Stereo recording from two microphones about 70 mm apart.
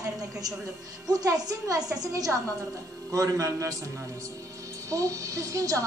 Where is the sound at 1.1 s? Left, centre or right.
Right.